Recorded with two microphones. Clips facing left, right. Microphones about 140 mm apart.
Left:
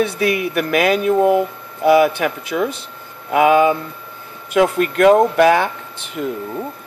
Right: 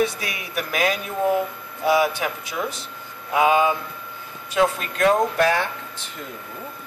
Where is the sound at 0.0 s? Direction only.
60° left (ahead or behind).